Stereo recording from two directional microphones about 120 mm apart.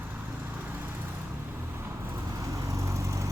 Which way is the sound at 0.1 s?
15° right (ahead or behind).